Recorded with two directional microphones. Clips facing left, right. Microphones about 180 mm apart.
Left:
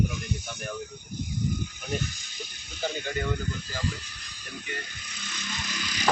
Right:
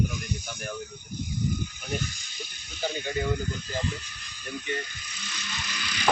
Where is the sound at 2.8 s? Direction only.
10° right (ahead or behind).